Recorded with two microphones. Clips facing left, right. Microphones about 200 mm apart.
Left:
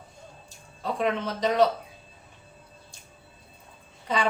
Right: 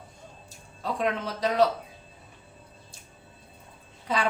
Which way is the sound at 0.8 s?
Centre (ahead or behind).